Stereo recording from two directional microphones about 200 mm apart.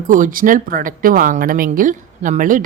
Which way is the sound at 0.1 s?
40° right (ahead or behind).